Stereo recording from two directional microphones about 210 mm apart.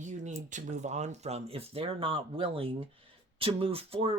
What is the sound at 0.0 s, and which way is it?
Speech, 35° right (ahead or behind).